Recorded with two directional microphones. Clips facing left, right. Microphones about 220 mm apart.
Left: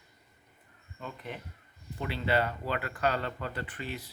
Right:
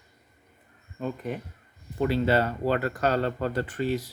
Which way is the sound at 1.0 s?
45° right (ahead or behind).